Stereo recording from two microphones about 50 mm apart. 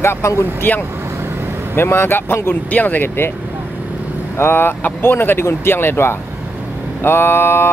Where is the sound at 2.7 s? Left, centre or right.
Left.